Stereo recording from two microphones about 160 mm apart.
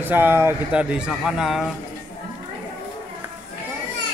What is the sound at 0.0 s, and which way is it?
A man's voice, 10° right (ahead or behind).